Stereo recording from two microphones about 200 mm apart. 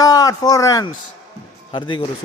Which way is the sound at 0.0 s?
15° left (ahead or behind).